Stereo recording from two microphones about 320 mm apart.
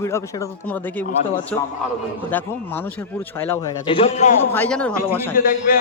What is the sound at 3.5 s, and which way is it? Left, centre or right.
Speech, centre.